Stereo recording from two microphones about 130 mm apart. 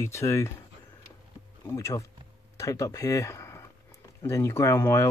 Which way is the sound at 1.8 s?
25° left (ahead or behind).